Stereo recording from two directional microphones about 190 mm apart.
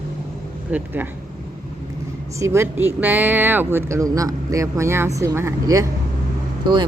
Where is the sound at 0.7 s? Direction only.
10° right (ahead or behind).